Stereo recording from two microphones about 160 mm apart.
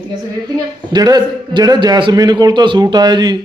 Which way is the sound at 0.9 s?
25° right (ahead or behind).